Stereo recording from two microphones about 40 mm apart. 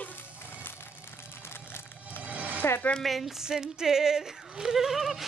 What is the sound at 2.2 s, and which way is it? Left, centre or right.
Music, right.